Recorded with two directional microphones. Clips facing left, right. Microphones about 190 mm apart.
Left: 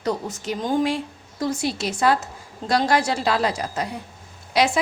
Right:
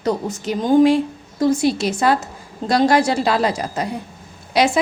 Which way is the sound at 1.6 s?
20° right (ahead or behind).